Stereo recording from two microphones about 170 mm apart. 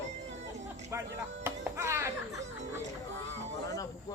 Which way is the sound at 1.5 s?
15° right (ahead or behind).